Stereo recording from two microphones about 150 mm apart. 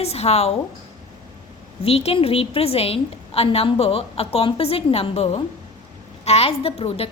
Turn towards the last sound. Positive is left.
turn(degrees=40)  # may be behind; listen again after turning